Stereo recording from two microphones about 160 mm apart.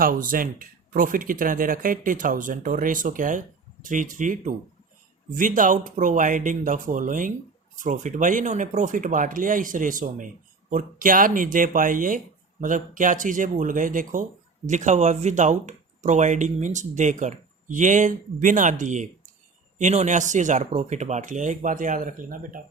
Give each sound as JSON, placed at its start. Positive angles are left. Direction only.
{"t": 0.0, "sound": "speech", "side_deg": -60}